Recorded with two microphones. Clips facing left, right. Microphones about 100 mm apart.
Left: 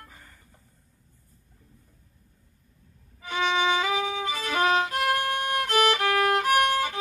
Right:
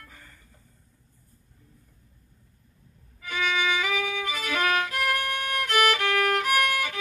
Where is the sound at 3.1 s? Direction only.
30° left (ahead or behind).